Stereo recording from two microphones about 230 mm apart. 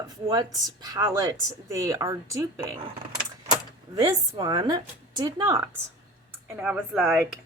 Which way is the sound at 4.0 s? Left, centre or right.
Centre.